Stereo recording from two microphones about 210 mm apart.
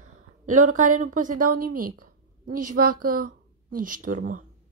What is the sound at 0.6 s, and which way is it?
Speech, 35° right (ahead or behind).